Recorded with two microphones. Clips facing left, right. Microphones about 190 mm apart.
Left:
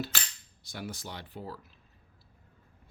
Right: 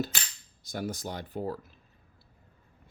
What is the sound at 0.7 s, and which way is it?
Speech, 45° right (ahead or behind).